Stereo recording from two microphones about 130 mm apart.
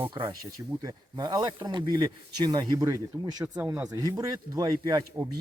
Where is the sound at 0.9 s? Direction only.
35° right (ahead or behind).